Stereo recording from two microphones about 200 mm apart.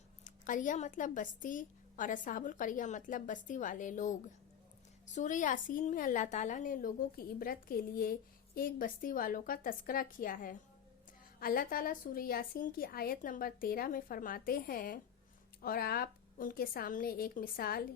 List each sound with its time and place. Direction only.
0.3 s a woman's voice: 40° left (ahead or behind)